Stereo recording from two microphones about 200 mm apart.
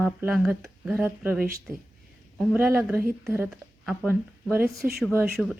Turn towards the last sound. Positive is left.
turn(degrees=-5)  # may be behind; listen again after turning